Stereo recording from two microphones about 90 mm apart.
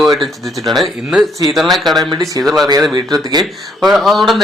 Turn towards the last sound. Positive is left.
turn(degrees=0)  # may be behind; listen again after turning